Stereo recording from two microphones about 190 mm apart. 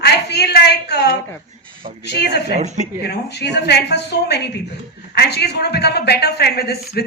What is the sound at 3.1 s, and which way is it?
A woman's voice, 60° left (ahead or behind).